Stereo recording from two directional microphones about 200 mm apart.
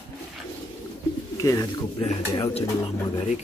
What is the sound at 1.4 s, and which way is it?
Speech, 20° left (ahead or behind).